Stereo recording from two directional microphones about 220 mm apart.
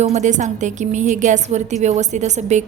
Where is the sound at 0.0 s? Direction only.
30° right (ahead or behind).